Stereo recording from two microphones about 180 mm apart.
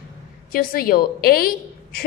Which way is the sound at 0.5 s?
55° left (ahead or behind).